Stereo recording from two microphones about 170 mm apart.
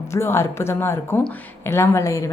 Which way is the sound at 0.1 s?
15° left (ahead or behind).